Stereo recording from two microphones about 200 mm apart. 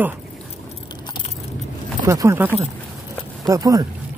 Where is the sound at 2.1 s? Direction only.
15° right (ahead or behind).